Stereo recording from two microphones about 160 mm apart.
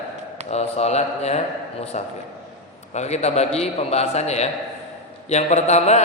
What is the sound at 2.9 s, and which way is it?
A man's voice, 45° left (ahead or behind).